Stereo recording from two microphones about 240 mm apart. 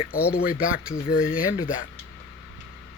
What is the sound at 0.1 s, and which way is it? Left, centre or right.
Speech, left.